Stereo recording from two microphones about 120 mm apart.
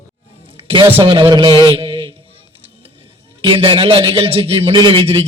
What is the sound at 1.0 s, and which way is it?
Speech, 40° right (ahead or behind).